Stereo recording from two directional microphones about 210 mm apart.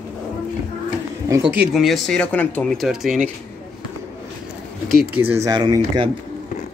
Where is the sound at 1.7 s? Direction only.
Centre (ahead or behind).